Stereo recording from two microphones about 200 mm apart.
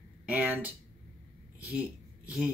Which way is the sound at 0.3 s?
5° right (ahead or behind).